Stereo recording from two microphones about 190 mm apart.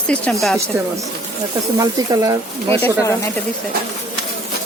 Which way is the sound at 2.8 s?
15° left (ahead or behind).